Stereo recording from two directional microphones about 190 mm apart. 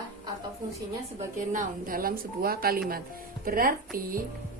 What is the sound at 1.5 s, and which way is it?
Speech, 50° right (ahead or behind).